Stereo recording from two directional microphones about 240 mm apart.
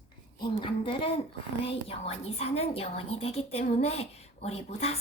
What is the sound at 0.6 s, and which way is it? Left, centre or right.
A woman's voice, left.